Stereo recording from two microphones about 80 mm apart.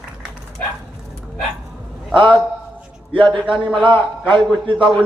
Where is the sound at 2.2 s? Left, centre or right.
Right.